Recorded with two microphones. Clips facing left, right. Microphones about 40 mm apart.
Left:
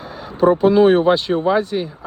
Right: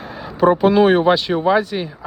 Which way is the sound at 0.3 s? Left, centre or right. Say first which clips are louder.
Even; right.